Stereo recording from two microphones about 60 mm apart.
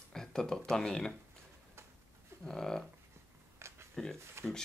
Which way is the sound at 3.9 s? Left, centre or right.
Centre.